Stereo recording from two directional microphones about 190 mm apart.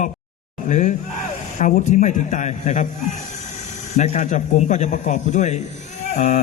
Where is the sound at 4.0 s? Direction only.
40° left (ahead or behind).